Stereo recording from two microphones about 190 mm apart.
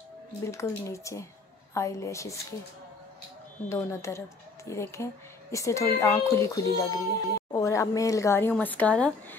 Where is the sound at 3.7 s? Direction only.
15° left (ahead or behind).